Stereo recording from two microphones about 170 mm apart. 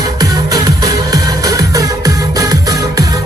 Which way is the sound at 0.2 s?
20° right (ahead or behind).